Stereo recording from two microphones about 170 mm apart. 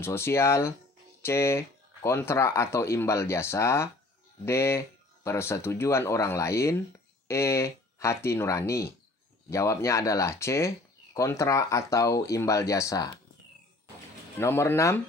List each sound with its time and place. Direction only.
0.0 s speech: 15° left (ahead or behind)
14.4 s speech: 15° left (ahead or behind)